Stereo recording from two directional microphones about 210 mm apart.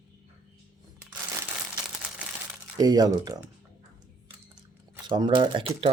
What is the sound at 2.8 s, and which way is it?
Speech, 20° right (ahead or behind).